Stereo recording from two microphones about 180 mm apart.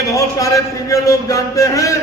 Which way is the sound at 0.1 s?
20° left (ahead or behind).